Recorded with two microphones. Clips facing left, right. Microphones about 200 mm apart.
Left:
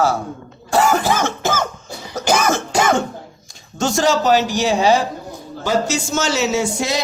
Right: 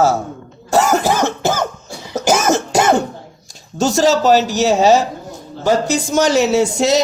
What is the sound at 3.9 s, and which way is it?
Speech, 40° right (ahead or behind).